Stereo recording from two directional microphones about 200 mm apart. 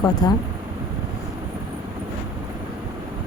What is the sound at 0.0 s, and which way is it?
Speech, 20° left (ahead or behind).